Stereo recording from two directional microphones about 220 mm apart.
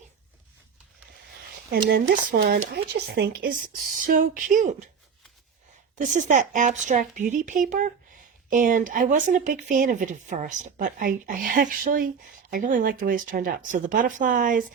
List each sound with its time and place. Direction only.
1.9 s speech: 45° right (ahead or behind)
6.0 s speech: 35° right (ahead or behind)